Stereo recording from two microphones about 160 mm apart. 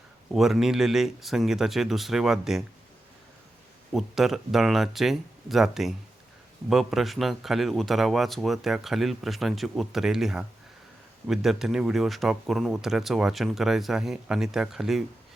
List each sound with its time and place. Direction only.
0.3 s speech: centre (ahead or behind)
3.9 s speech: centre (ahead or behind)